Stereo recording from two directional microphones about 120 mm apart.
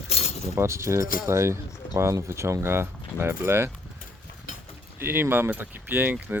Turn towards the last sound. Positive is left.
turn(degrees=-15)  # may be behind; listen again after turning